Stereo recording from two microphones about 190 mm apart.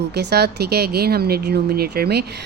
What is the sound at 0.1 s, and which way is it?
Speech, 60° right (ahead or behind).